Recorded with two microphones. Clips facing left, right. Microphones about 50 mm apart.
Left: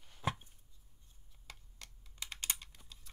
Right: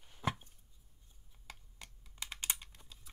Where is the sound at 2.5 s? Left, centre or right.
Centre.